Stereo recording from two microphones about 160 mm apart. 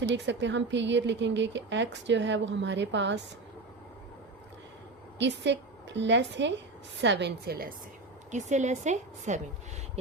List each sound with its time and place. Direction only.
0.0 s speech: 90° right
5.2 s a woman's voice: 90° right
8.3 s a woman's voice: 50° right (ahead or behind)